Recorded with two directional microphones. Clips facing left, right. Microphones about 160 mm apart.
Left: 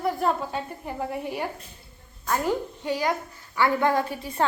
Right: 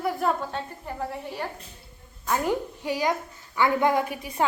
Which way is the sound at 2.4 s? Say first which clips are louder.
Even; 15° right (ahead or behind).